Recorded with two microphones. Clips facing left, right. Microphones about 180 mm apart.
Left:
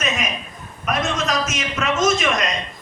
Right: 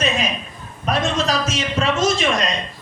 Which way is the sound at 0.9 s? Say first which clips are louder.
Right 2 dB; 30° right (ahead or behind).